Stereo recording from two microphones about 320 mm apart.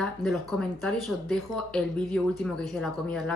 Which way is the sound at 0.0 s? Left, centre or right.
Centre.